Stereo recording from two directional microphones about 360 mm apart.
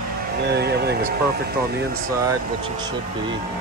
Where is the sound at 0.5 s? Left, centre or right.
Right.